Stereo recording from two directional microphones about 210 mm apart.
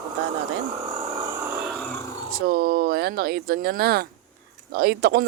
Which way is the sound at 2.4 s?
45° right (ahead or behind).